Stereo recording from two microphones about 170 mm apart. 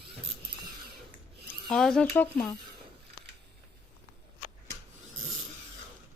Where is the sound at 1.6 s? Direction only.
Centre (ahead or behind).